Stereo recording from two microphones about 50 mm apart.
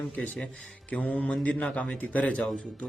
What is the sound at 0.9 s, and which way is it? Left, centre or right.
A man's voice, left.